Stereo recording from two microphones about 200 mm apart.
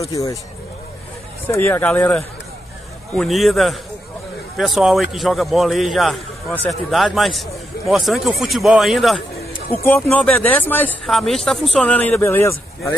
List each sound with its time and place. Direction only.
0.1 s speech: 15° left (ahead or behind)
1.5 s a man's voice: 10° left (ahead or behind)
9.8 s speech: 10° left (ahead or behind)